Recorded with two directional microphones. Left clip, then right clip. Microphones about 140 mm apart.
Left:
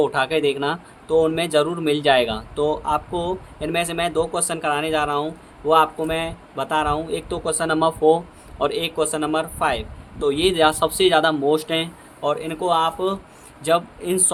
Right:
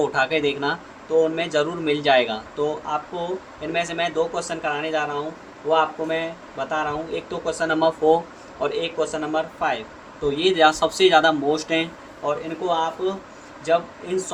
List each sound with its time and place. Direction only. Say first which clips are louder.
0.0 s speech: left 1 dB; 50° left (ahead or behind)
1.1 s speech: left 2 dB; 60° left (ahead or behind)